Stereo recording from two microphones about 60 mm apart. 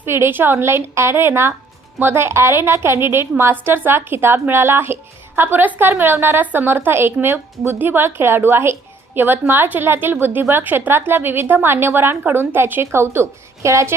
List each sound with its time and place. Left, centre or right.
0.0 s a woman's voice: right